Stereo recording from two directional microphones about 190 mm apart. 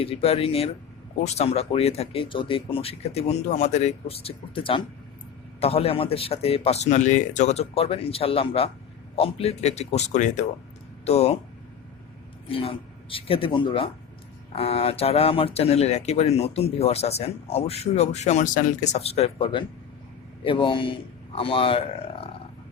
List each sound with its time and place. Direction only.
0.0 s speech: 30° left (ahead or behind)
12.5 s a man's voice: 30° left (ahead or behind)